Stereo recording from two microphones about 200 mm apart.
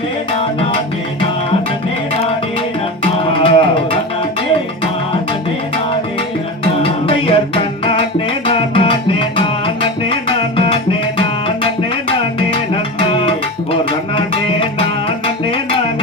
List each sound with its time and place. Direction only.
3.0 s music: 25° left (ahead or behind)
6.8 s music: 25° left (ahead or behind)
11.2 s tabla: 25° left (ahead or behind)
12.4 s music: 25° left (ahead or behind)
15.4 s music: 25° left (ahead or behind)